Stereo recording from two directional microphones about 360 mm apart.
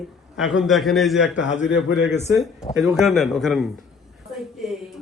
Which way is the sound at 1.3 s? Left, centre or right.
Centre.